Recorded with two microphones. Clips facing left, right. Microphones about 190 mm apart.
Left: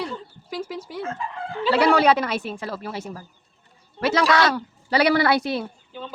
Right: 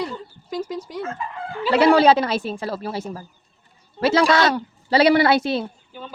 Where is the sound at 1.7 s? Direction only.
25° right (ahead or behind).